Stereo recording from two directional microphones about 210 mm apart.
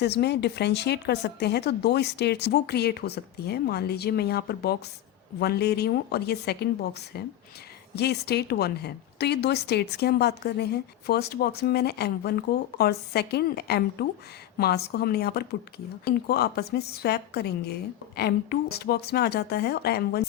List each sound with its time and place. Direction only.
0.0 s speech: 50° left (ahead or behind)
7.9 s speech: 50° left (ahead or behind)